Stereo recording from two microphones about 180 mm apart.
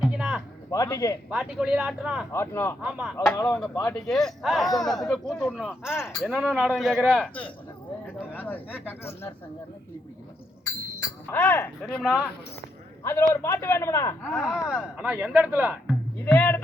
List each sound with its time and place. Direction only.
0.0 s a sound: 5° right (ahead or behind)
0.7 s a man's voice: 20° left (ahead or behind)
1.3 s speech: 5° right (ahead or behind)
2.3 s a man's voice: 15° left (ahead or behind)
8.3 s a sound: 10° left (ahead or behind)
8.9 s a man's voice: 15° left (ahead or behind)
11.3 s a man's voice: 10° left (ahead or behind)
13.1 s a man's voice: 15° left (ahead or behind)
14.3 s speech: centre (ahead or behind)
16.2 s a man's voice: 10° left (ahead or behind)